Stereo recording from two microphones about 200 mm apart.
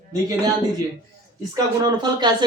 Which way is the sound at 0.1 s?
15° right (ahead or behind).